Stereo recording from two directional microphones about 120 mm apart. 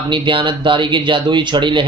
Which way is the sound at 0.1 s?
40° right (ahead or behind).